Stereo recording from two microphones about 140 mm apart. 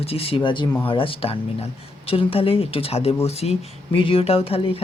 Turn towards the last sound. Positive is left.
turn(degrees=45)  # may be behind; listen again after turning